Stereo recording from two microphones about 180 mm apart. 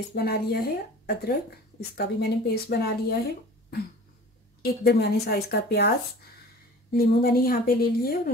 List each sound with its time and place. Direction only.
0.1 s a woman's voice: 60° left (ahead or behind)
4.6 s a woman's voice: 60° left (ahead or behind)
6.9 s a woman's voice: 55° left (ahead or behind)